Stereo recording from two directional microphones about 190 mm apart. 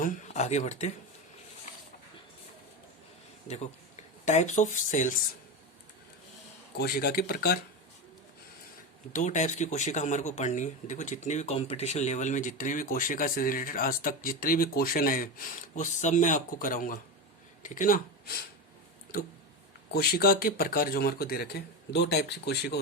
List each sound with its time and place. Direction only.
0.0 s speech: 40° left (ahead or behind)
3.5 s speech: 35° left (ahead or behind)
6.7 s speech: 55° left (ahead or behind)
9.1 s speech: 40° left (ahead or behind)
19.9 s speech: 55° left (ahead or behind)